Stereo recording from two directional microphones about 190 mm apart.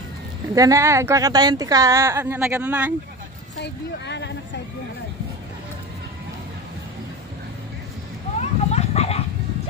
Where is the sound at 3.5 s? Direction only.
65° left (ahead or behind).